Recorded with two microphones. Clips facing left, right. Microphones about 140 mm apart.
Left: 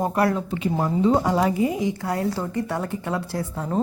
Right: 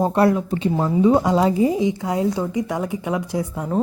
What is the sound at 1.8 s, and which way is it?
Speech, 20° right (ahead or behind).